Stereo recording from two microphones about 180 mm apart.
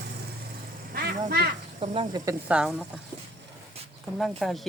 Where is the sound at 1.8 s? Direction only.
30° right (ahead or behind).